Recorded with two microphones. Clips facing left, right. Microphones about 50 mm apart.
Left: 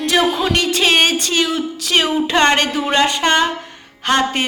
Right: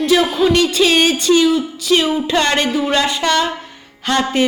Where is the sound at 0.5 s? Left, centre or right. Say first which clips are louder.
Even; left.